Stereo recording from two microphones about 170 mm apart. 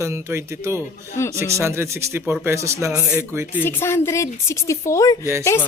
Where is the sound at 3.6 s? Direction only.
15° left (ahead or behind).